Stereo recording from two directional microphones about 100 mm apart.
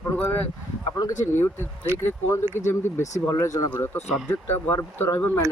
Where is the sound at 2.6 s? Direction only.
30° left (ahead or behind).